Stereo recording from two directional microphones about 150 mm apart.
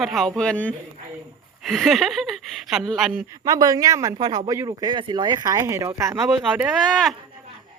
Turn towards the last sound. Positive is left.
turn(degrees=0)  # may be behind; listen again after turning